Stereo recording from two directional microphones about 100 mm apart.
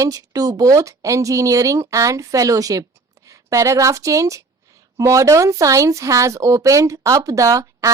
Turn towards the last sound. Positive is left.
turn(degrees=-35)  # may be behind; listen again after turning